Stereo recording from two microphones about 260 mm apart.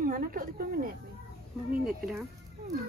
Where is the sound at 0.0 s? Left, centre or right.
Right.